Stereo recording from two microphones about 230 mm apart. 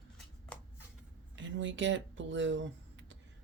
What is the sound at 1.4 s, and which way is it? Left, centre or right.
Speech, right.